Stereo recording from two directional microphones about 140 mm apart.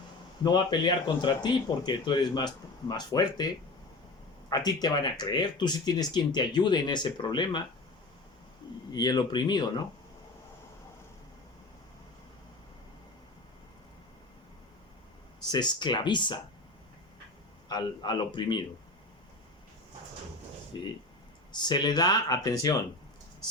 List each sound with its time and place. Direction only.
0.4 s speech: 30° left (ahead or behind)
8.9 s speech: 30° left (ahead or behind)
15.4 s speech: 30° left (ahead or behind)
17.7 s speech: 30° left (ahead or behind)
20.7 s speech: 30° left (ahead or behind)